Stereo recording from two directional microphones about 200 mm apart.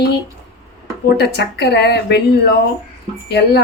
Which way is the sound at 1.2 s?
55° left (ahead or behind).